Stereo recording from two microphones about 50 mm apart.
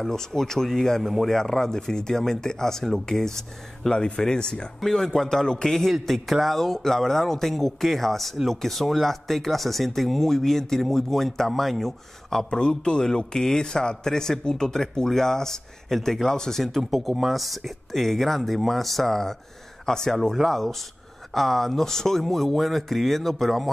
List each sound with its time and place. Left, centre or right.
0.0 s a man's voice: centre
12.4 s a man's voice: centre